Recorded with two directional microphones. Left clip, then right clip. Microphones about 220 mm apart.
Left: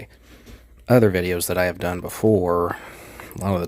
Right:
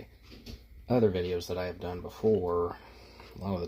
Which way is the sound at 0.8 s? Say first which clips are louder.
Left 10 dB; 45° left (ahead or behind).